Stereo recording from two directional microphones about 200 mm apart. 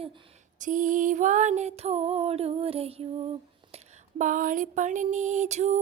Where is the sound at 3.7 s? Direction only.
40° right (ahead or behind).